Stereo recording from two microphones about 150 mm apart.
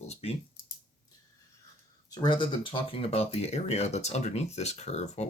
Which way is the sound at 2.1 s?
30° left (ahead or behind).